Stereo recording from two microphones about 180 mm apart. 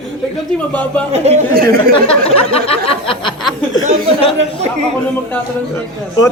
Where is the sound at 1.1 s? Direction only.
35° right (ahead or behind).